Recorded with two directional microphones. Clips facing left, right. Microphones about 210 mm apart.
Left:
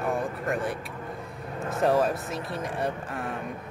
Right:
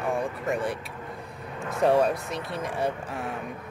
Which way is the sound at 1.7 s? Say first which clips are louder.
Right 2 dB; centre (ahead or behind).